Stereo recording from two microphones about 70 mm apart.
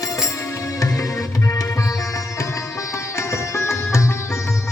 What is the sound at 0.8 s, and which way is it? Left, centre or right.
Music, left.